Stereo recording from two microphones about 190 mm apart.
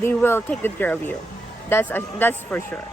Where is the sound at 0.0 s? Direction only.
10° left (ahead or behind).